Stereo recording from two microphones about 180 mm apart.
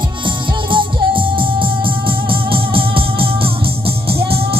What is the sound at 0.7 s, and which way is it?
Music, 30° right (ahead or behind).